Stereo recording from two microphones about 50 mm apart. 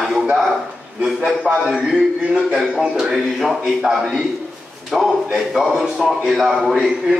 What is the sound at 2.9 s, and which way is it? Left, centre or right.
A man's voice, centre.